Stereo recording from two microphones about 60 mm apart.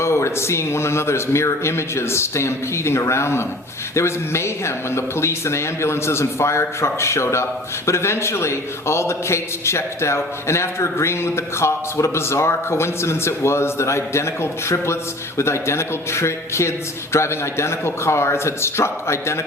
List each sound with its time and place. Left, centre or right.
0.0 s a man's voice: left